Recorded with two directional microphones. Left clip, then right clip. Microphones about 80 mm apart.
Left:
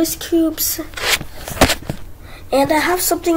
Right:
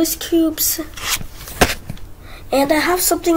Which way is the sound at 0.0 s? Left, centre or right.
Centre.